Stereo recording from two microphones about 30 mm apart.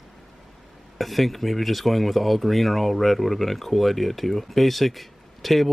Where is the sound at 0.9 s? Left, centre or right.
Centre.